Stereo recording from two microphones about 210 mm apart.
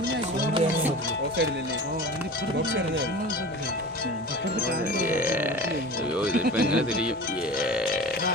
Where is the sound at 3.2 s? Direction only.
45° left (ahead or behind).